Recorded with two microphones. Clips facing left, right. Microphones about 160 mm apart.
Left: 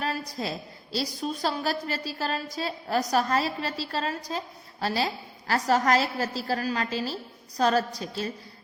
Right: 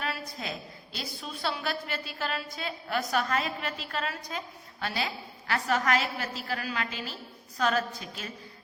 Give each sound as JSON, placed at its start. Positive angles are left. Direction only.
{"t": 0.0, "sound": "a woman's voice", "side_deg": 35}